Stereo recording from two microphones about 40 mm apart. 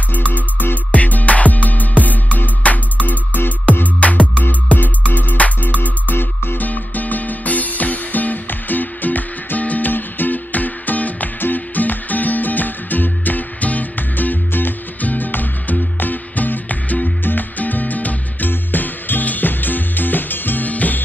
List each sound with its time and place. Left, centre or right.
0.9 s music: left
6.1 s music: left
6.6 s music: left
17.2 s music: left